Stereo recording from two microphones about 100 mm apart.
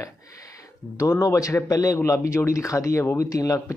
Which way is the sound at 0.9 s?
30° left (ahead or behind).